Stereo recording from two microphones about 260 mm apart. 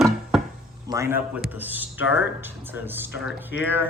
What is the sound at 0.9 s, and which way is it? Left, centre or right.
Speech, centre.